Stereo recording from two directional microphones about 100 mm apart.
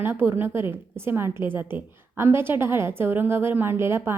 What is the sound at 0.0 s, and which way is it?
A woman's voice, 20° right (ahead or behind).